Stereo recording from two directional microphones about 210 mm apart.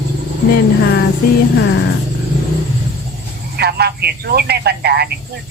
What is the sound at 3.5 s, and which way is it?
Speech, 50° right (ahead or behind).